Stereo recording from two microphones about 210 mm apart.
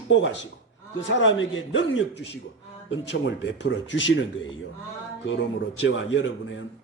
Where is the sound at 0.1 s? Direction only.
60° left (ahead or behind).